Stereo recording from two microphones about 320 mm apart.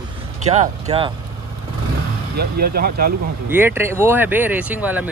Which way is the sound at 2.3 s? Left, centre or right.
Right.